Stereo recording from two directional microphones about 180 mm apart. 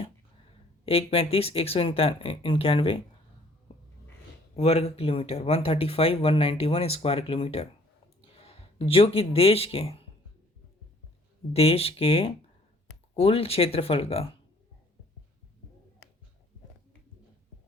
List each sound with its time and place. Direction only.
0.9 s speech: 35° left (ahead or behind)
4.5 s speech: 35° left (ahead or behind)
11.5 s speech: 35° left (ahead or behind)